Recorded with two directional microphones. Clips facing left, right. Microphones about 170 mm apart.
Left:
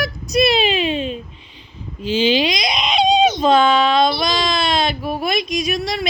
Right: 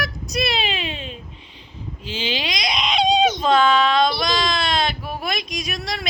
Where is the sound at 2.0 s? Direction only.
25° right (ahead or behind).